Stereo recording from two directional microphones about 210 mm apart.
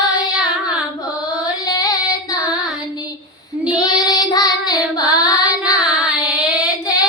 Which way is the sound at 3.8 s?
20° left (ahead or behind).